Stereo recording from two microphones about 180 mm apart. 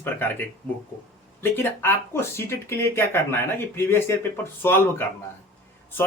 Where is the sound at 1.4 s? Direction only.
10° left (ahead or behind).